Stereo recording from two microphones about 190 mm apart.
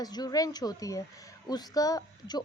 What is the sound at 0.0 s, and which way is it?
A woman's voice, 20° left (ahead or behind).